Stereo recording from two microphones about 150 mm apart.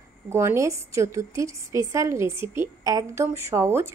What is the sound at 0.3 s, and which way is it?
A woman's voice, 15° right (ahead or behind).